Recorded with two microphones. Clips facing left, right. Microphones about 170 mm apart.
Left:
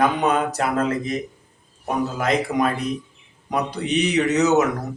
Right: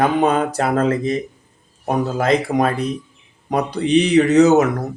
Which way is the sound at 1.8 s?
35° right (ahead or behind).